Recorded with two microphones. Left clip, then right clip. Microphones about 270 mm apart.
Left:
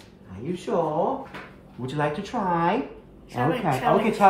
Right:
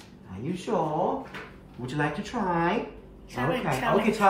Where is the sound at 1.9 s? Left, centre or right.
Left.